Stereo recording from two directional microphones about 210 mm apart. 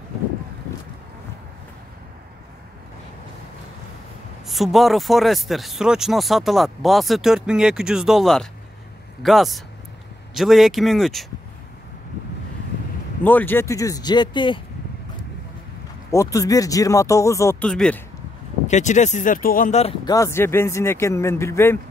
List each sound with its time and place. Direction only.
4.5 s speech: centre (ahead or behind)
13.2 s speech: 10° left (ahead or behind)
16.1 s speech: 15° left (ahead or behind)
18.7 s speech: 35° left (ahead or behind)
20.1 s speech: 15° left (ahead or behind)